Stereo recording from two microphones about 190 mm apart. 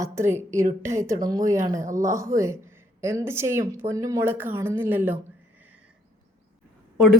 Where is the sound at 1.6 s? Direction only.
40° right (ahead or behind).